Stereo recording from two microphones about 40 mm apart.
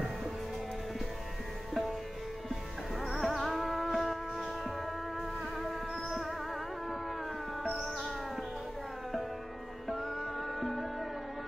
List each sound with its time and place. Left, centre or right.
1.7 s music: centre
3.1 s music: centre
7.7 s music: centre
10.6 s music: centre